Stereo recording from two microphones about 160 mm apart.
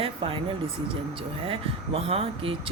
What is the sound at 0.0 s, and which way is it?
Speech, 35° right (ahead or behind).